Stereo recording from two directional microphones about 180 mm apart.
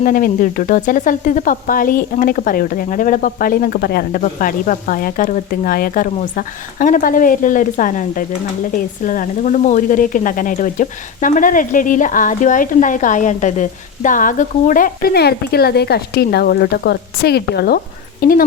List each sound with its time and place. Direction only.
0.0 s speech: 50° left (ahead or behind)